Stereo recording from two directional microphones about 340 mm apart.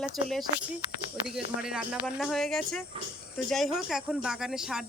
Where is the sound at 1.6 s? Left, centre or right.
Centre.